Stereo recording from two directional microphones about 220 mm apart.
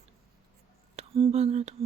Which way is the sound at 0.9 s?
25° right (ahead or behind).